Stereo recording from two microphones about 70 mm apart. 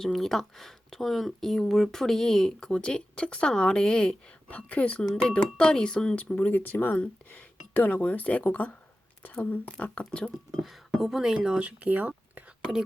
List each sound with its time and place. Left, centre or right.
0.0 s speech: centre
6.2 s speech: left
10.6 s speech: centre; by 12.4 s right